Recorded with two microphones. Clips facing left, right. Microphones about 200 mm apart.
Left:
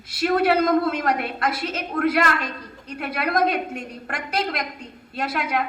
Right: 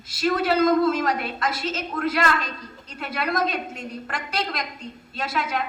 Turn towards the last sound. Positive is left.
turn(degrees=60)  # may be behind; listen again after turning